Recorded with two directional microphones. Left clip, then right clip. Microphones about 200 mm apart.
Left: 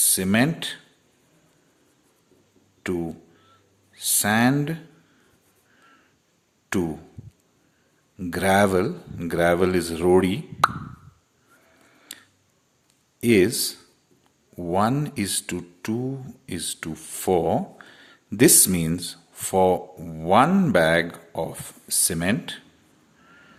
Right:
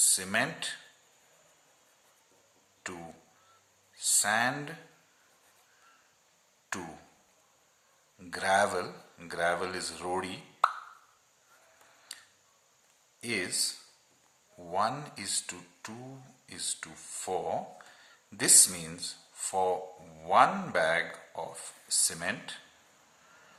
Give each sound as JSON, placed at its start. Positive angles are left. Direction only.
{"t": 0.2, "sound": "speech", "side_deg": 35}
{"t": 2.8, "sound": "speech", "side_deg": 35}
{"t": 6.7, "sound": "speech", "side_deg": 35}
{"t": 8.2, "sound": "speech", "side_deg": 35}
{"t": 12.1, "sound": "tick-tock", "side_deg": 40}
{"t": 13.1, "sound": "speech", "side_deg": 40}